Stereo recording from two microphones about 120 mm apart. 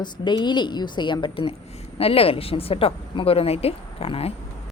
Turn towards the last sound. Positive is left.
turn(degrees=55)  # may be behind; listen again after turning